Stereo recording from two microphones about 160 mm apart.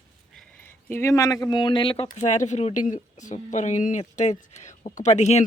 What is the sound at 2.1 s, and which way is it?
Speech, 50° left (ahead or behind).